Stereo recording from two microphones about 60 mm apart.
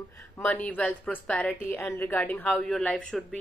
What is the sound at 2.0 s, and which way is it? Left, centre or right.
Speech, left.